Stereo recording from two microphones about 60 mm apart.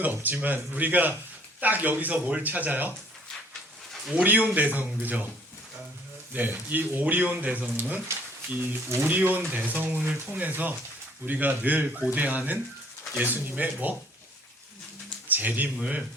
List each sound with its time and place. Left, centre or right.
0.0 s speech: right
4.1 s speech: right
6.3 s speech: right
9.0 s speech: right
15.3 s speech: right
15.8 s speech: centre